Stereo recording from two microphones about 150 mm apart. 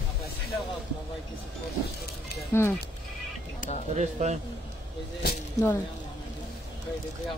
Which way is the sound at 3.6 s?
60° left (ahead or behind).